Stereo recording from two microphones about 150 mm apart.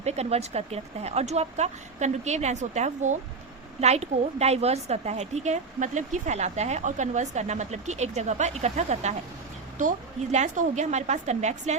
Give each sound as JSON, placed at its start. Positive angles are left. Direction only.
{"t": 0.0, "sound": "a woman's voice", "side_deg": -45}
{"t": 10.3, "sound": "a woman's voice", "side_deg": -55}